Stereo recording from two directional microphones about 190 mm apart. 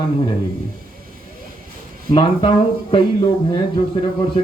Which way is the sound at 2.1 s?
25° left (ahead or behind).